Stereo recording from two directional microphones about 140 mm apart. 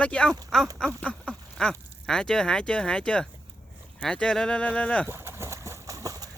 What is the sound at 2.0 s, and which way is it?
Speech, 5° left (ahead or behind).